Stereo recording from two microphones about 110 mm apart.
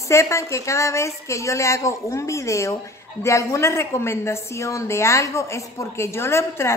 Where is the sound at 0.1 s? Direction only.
25° left (ahead or behind).